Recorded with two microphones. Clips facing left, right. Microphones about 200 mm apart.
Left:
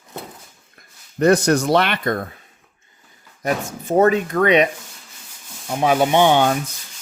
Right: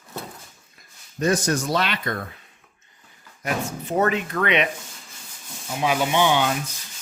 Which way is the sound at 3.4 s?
35° left (ahead or behind).